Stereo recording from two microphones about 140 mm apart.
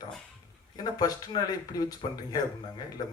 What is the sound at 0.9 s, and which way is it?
Speech, 30° left (ahead or behind).